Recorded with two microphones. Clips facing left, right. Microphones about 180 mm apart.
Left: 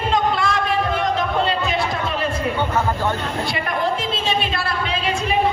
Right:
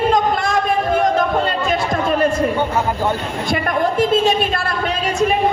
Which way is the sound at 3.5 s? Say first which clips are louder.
Right 6 dB; 50° right (ahead or behind).